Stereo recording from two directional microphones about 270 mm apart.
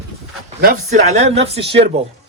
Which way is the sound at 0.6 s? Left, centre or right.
Right.